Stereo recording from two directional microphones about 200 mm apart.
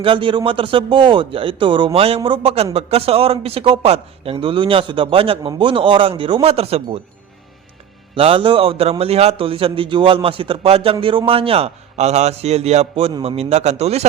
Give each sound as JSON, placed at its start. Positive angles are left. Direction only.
{"t": 0.0, "sound": "speech", "side_deg": -25}
{"t": 8.1, "sound": "a man's voice", "side_deg": -25}